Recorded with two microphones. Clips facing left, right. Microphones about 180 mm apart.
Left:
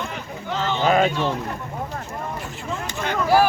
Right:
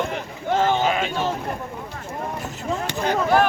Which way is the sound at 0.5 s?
50° right (ahead or behind).